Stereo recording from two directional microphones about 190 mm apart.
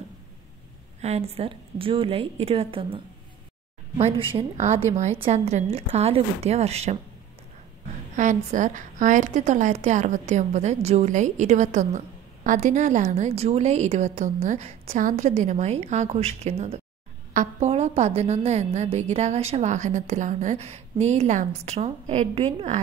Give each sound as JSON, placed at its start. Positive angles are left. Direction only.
{"t": 1.0, "sound": "a woman's voice", "side_deg": -35}
{"t": 4.0, "sound": "a woman's voice", "side_deg": -30}
{"t": 8.2, "sound": "a woman's voice", "side_deg": -40}